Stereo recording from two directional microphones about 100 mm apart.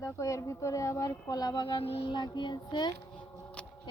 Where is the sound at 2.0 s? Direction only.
45° left (ahead or behind).